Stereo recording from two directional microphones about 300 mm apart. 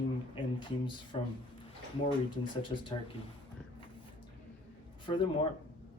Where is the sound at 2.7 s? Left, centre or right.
Centre.